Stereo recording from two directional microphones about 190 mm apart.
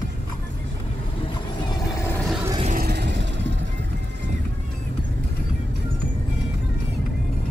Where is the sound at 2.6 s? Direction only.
45° right (ahead or behind).